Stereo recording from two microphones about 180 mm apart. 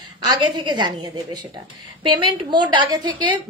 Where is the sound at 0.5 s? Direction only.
25° right (ahead or behind).